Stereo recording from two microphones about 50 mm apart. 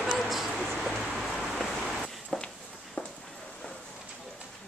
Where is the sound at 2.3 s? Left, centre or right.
Centre.